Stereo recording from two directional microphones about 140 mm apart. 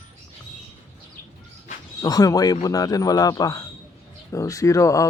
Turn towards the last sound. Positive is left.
turn(degrees=25)  # may be behind; listen again after turning